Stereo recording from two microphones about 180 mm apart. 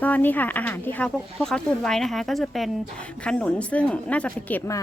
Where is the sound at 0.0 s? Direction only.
10° left (ahead or behind).